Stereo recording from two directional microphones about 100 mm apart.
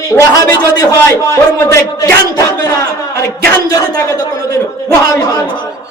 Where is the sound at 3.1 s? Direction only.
30° left (ahead or behind).